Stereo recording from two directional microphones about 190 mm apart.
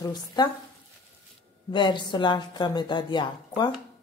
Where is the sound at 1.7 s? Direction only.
25° left (ahead or behind).